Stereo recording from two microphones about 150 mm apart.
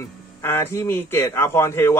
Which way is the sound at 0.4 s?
15° left (ahead or behind).